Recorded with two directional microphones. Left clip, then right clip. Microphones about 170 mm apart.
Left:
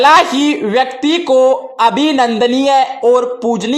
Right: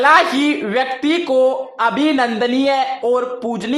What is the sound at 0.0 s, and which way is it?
A man's voice, 30° left (ahead or behind).